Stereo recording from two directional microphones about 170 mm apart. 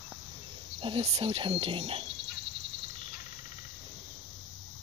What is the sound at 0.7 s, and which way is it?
Speech, 30° right (ahead or behind).